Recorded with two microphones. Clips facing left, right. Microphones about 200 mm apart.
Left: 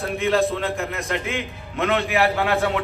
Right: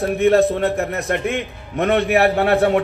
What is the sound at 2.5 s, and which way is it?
Speech, 50° right (ahead or behind).